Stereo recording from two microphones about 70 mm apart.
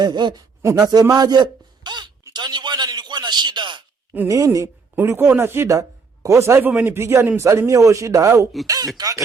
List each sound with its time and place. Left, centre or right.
0.0 s speech: right
0.8 s a man's voice: right
4.3 s speech: right
4.9 s a man's voice: right
6.6 s a man's voice: right
8.6 s speech: right